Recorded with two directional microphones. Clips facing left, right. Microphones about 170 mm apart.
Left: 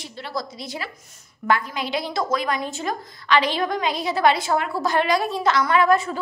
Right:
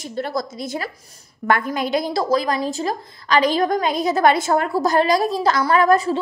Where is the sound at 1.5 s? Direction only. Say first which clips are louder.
Right 4 dB; 45° right (ahead or behind).